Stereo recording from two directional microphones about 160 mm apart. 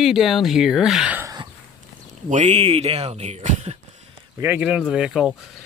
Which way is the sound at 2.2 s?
50° right (ahead or behind).